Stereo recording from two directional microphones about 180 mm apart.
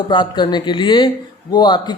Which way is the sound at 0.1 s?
25° left (ahead or behind).